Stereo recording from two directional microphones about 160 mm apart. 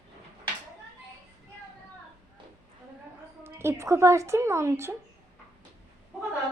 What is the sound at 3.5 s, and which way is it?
A woman's voice, 15° right (ahead or behind).